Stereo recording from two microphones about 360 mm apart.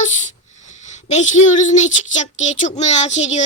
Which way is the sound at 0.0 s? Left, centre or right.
Centre.